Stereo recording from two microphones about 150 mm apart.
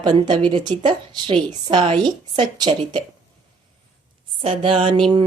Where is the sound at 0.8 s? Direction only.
35° right (ahead or behind).